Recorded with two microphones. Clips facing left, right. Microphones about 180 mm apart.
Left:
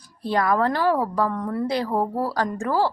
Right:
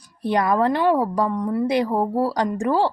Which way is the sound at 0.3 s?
20° right (ahead or behind).